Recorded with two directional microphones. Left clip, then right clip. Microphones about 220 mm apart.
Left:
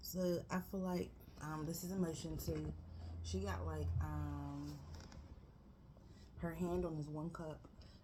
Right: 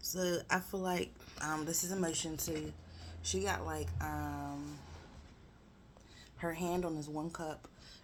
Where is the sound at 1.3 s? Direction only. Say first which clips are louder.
Right 10 dB; 25° right (ahead or behind).